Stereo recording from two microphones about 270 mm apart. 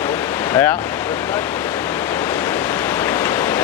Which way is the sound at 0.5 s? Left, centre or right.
Centre.